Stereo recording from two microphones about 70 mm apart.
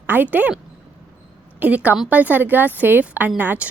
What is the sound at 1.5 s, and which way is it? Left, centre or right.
A woman's voice, right.